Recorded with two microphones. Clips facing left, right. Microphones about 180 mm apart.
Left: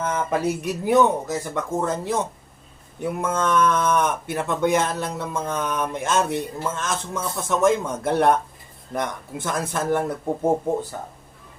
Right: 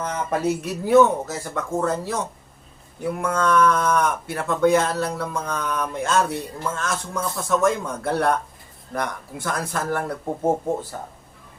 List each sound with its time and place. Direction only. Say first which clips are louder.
0.3 s speech: even; 15° left (ahead or behind)